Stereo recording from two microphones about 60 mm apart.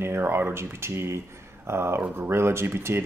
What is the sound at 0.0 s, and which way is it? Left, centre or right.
Speech, right.